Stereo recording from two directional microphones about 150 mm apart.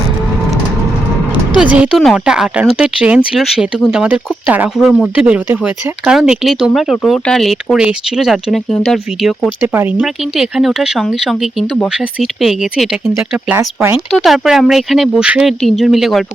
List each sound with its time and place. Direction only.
1.7 s speech: 5° right (ahead or behind)
9.7 s speech: 10° right (ahead or behind)
10.3 s speech: centre (ahead or behind)
13.6 s speech: 15° right (ahead or behind)
14.1 s speech: centre (ahead or behind)